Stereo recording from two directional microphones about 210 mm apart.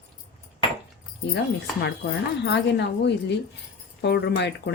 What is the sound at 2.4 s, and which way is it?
Speech, 55° left (ahead or behind).